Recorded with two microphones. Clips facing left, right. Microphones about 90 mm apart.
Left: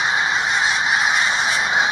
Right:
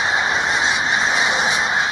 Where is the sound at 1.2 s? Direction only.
20° right (ahead or behind).